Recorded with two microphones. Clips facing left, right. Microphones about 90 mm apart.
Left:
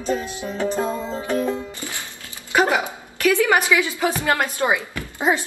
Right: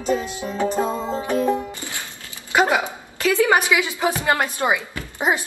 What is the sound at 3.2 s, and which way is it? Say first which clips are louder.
A woman's voice: even; 20° right (ahead or behind).